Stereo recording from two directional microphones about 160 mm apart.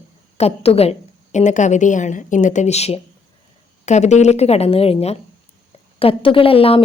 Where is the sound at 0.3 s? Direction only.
40° left (ahead or behind).